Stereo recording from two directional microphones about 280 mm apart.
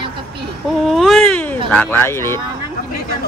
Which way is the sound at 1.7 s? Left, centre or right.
Centre.